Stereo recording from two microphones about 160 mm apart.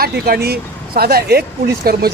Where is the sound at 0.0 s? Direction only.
75° right (ahead or behind).